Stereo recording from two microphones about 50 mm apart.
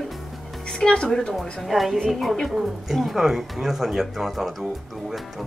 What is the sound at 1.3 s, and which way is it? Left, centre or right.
A woman's voice, centre.